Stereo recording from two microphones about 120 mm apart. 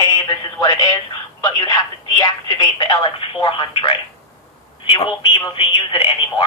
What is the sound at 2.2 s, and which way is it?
Speech, 35° left (ahead or behind).